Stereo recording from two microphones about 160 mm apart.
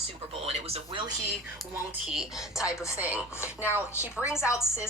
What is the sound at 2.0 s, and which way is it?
Speech, 5° right (ahead or behind).